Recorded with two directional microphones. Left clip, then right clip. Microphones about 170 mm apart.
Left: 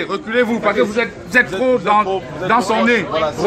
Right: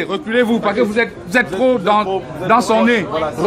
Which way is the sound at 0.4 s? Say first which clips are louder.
Even; 55° right (ahead or behind).